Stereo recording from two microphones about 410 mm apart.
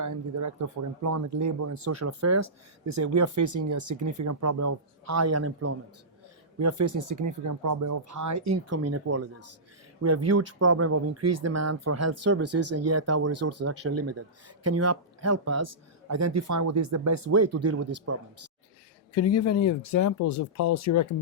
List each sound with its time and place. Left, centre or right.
0.0 s speech: right
19.1 s speech: left